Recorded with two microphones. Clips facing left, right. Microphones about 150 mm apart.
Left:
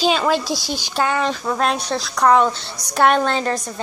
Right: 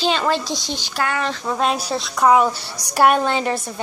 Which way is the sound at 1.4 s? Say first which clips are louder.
Even; 5° right (ahead or behind).